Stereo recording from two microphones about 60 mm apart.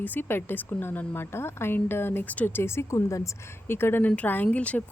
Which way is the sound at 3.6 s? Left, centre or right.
Left.